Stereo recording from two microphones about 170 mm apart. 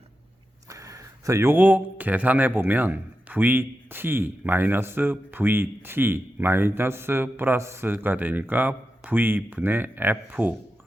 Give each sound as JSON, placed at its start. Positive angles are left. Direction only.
{"t": 0.7, "sound": "speech", "side_deg": -20}